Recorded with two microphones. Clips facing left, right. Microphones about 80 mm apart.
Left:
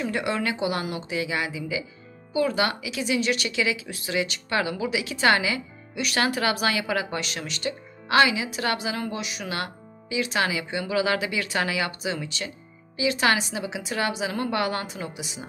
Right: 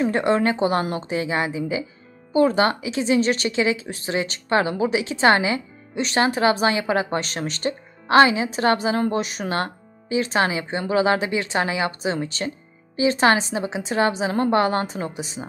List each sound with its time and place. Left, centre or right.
0.0 s speech: right